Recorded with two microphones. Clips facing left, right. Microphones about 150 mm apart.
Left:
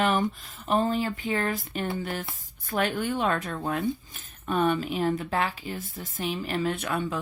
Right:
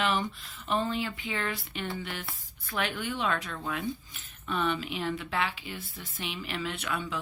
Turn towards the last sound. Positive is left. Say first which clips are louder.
# left 6 dB
turn(degrees=45)  # may be behind; listen again after turning